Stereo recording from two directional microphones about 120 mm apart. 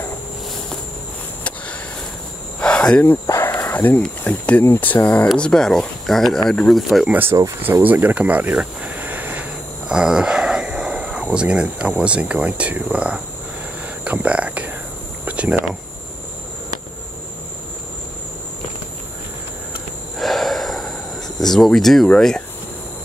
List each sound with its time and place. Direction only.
2.6 s insect: 10° left (ahead or behind)
3.3 s speech: 20° left (ahead or behind); by 7.1 s centre (ahead or behind)
7.1 s speech: 15° right (ahead or behind)
14.0 s whispering: 10° right (ahead or behind)
15.2 s cricket: 10° right (ahead or behind)
20.2 s a sound: centre (ahead or behind)
21.4 s speech: 5° left (ahead or behind)